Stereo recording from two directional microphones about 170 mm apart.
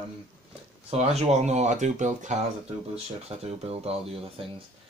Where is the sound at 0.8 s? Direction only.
40° right (ahead or behind).